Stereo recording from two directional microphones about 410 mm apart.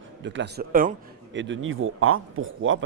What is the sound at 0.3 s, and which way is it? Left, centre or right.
Speech, right.